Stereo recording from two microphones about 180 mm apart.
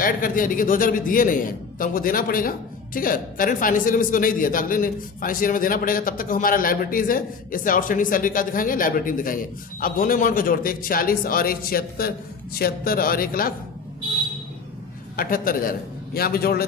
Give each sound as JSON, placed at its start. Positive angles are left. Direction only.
{"t": 0.0, "sound": "a man's voice", "side_deg": 50}
{"t": 15.1, "sound": "a man's voice", "side_deg": 50}